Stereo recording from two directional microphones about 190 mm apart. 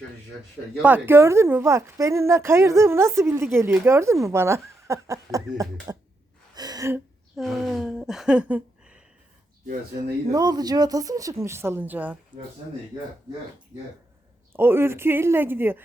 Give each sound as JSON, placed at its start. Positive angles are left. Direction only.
{"t": 0.8, "sound": "a woman's voice", "side_deg": -10}
{"t": 6.5, "sound": "gasp", "side_deg": -20}
{"t": 7.3, "sound": "speech", "side_deg": 0}
{"t": 10.0, "sound": "a woman's voice", "side_deg": -20}
{"t": 14.5, "sound": "a woman's voice", "side_deg": -10}